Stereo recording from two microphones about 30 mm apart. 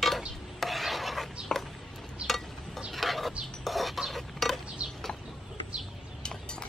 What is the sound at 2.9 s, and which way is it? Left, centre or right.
Bird, centre.